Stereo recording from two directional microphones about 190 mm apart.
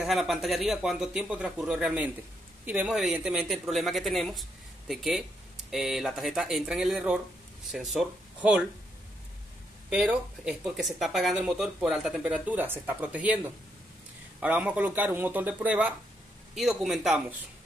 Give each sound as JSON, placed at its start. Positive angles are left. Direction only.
{"t": 0.0, "sound": "speech", "side_deg": 0}
{"t": 9.8, "sound": "speech", "side_deg": -5}